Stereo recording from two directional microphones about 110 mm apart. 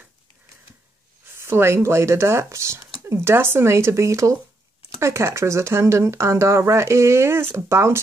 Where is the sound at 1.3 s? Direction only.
25° right (ahead or behind).